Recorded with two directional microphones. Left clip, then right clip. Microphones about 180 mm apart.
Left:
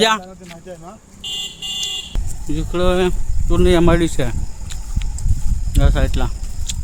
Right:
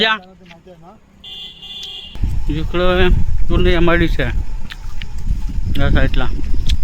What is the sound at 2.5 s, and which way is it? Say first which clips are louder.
Speech: right 2 dB; 10° left (ahead or behind).